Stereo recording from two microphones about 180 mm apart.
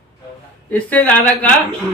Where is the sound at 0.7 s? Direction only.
10° left (ahead or behind).